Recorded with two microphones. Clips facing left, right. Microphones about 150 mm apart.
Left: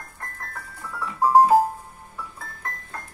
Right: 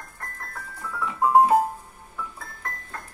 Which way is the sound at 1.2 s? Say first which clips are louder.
Left 2 dB; centre (ahead or behind).